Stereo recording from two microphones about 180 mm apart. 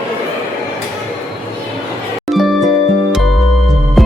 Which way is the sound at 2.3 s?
Centre (ahead or behind).